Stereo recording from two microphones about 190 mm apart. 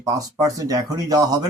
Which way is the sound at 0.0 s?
20° right (ahead or behind).